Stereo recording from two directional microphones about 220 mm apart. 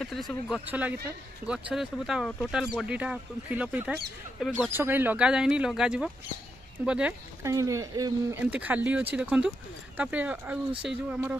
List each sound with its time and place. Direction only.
0.0 s speech: centre (ahead or behind)